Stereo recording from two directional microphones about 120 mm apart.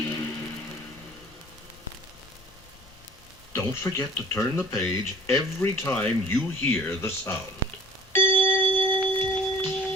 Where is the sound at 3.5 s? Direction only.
20° left (ahead or behind).